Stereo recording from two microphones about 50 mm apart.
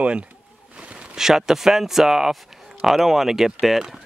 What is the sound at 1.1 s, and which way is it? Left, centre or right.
Speech, centre.